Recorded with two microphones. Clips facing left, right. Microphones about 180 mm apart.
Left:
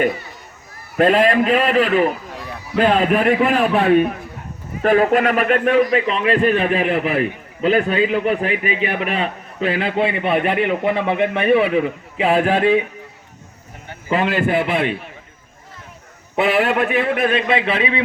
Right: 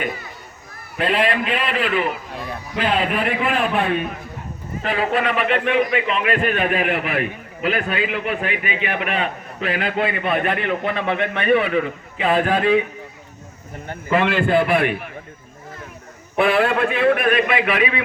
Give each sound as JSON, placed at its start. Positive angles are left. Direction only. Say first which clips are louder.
{"t": 0.9, "sound": "a man's voice", "louder": "left 6 dB", "side_deg": 45}
{"t": 4.8, "sound": "a man's voice", "louder": "left 7 dB", "side_deg": 50}
{"t": 14.1, "sound": "a man's voice", "louder": "even", "side_deg": 35}
{"t": 14.3, "sound": "a man's voice", "louder": "right 1 dB", "side_deg": 20}
{"t": 16.3, "sound": "a man's voice", "louder": "even", "side_deg": 20}